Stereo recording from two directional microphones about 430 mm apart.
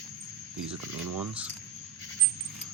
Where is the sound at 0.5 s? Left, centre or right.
Right.